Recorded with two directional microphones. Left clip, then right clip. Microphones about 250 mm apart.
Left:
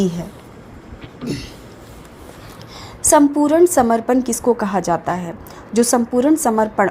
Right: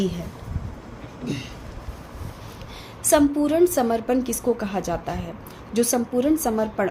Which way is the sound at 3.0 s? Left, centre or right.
Left.